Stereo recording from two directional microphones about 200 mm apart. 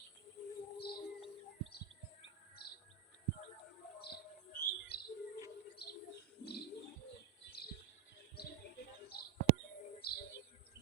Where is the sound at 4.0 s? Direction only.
50° left (ahead or behind).